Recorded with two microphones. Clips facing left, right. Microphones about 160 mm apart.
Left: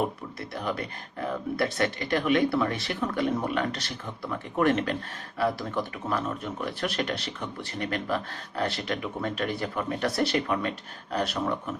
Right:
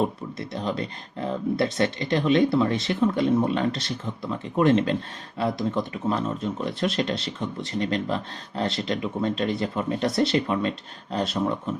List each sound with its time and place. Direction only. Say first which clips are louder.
0.0 s speech: right 4 dB; 25° right (ahead or behind)